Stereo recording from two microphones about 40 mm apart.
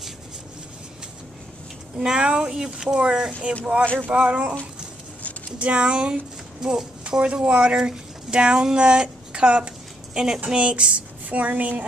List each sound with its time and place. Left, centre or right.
2.0 s speech: right
5.6 s a woman's voice: right
10.4 s speech: right
11.2 s a woman's voice: right